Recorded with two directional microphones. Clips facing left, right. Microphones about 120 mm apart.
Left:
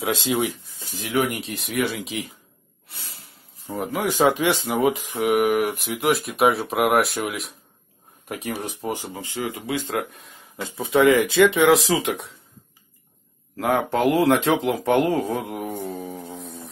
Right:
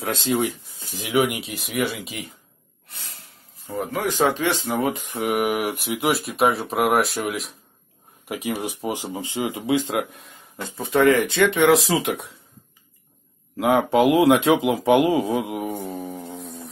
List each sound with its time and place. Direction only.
0.0 s speech: 5° left (ahead or behind)
0.9 s speech: 15° right (ahead or behind)
1.6 s speech: centre (ahead or behind)
4.1 s speech: 15° left (ahead or behind)
8.5 s speech: 10° right (ahead or behind)
10.1 s speech: centre (ahead or behind)
13.6 s speech: 10° right (ahead or behind)